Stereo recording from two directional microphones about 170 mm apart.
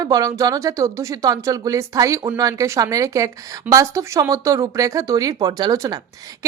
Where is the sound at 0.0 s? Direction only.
20° right (ahead or behind).